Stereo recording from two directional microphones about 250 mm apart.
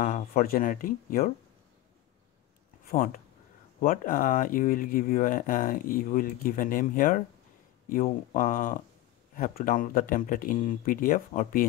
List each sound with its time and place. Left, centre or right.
0.0 s speech: left
2.9 s speech: left